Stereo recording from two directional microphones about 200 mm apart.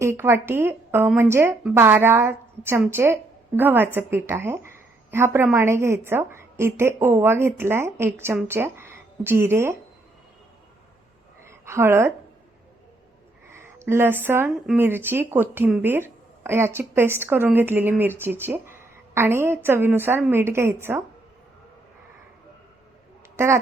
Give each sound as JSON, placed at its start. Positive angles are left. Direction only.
{"t": 0.0, "sound": "a woman's voice", "side_deg": -10}
{"t": 11.4, "sound": "a sound", "side_deg": -15}
{"t": 13.5, "sound": "a woman's voice", "side_deg": -10}